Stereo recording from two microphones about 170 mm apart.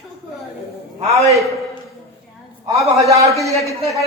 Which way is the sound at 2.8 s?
20° right (ahead or behind).